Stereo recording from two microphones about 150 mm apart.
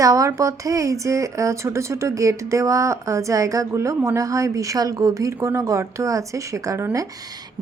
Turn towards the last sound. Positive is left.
turn(degrees=-20)  # may be behind; listen again after turning